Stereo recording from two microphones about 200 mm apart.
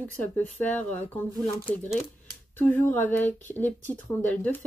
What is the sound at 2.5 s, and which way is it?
Speech, 10° left (ahead or behind).